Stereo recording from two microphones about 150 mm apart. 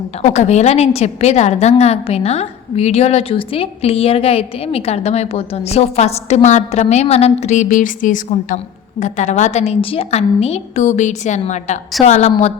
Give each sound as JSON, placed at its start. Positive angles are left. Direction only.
{"t": 0.2, "sound": "a woman's voice", "side_deg": 45}